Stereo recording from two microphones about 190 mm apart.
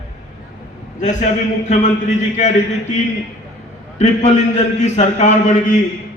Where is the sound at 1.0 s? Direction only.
40° left (ahead or behind).